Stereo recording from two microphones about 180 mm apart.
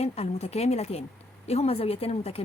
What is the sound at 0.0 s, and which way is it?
A woman's voice, 35° left (ahead or behind).